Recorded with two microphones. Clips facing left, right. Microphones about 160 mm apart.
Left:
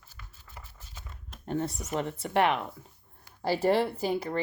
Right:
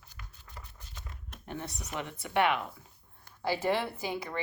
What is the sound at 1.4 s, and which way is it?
Speech, 45° left (ahead or behind).